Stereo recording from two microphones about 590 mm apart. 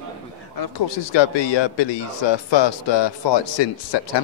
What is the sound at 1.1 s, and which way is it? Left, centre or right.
A man's voice, left.